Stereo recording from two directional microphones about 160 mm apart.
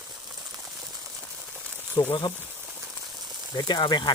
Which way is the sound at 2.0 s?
30° left (ahead or behind).